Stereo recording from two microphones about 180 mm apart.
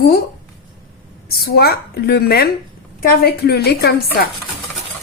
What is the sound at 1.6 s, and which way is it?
Speech, 60° left (ahead or behind).